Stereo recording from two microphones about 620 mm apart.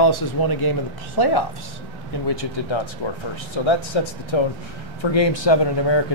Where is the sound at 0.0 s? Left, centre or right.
Left.